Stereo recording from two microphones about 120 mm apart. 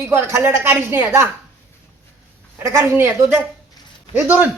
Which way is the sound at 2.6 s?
25° right (ahead or behind).